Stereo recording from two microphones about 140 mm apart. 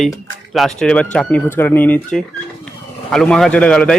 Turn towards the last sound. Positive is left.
turn(degrees=5)  # may be behind; listen again after turning